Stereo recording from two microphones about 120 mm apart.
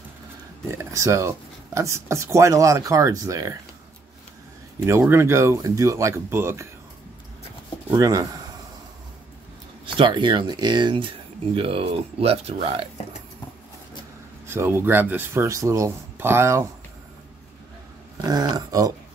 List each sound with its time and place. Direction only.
0.7 s speech: 25° right (ahead or behind)
5.1 s speech: 20° right (ahead or behind)
7.9 s speech: 30° right (ahead or behind)
9.9 s speech: 40° right (ahead or behind)
14.5 s speech: 20° right (ahead or behind)
18.2 s speech: 35° right (ahead or behind)